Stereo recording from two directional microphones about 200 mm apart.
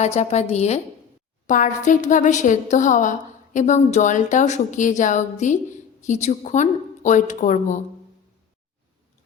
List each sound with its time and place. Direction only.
0.0 s a woman's voice: 35° left (ahead or behind)